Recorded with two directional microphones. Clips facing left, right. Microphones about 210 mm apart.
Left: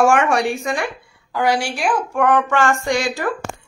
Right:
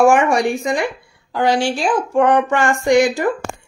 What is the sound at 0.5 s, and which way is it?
A woman's voice, 20° right (ahead or behind).